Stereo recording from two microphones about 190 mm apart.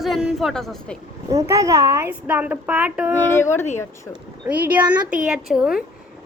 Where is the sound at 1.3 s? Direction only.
15° right (ahead or behind).